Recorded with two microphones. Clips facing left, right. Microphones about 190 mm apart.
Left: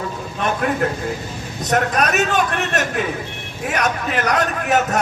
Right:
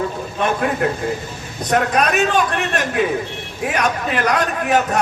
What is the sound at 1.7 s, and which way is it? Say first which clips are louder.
Speech: right 1 dB; 45° left (ahead or behind).